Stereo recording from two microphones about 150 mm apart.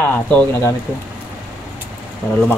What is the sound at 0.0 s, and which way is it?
Speech, 15° left (ahead or behind).